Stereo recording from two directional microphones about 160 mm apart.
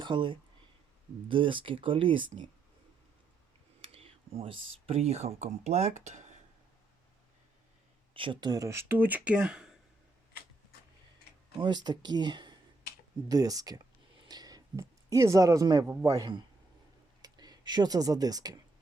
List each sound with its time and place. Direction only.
0.0 s speech: 30° right (ahead or behind)
3.8 s speech: 35° right (ahead or behind)
8.1 s speech: 30° right (ahead or behind); by 9.6 s 5° right (ahead or behind)
11.5 s speech: 25° right (ahead or behind)
14.3 s a sound: 25° right (ahead or behind)
15.9 s speech: 15° right (ahead or behind)